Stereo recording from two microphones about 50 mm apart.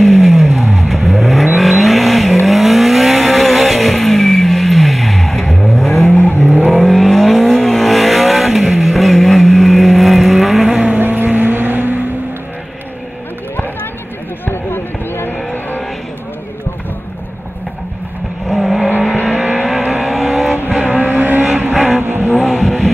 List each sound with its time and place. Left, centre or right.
0.0 s vehicle: centre
6.1 s vehicle: left
6.7 s vehicle: centre
11.0 s vehicle: right
14.4 s a sound: left
18.5 s vehicle: centre
20.7 s vehicle: right
21.0 s vehicle: right
22.5 s vehicle: centre